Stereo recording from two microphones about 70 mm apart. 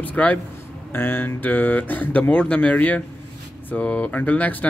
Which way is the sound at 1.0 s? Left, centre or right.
Left.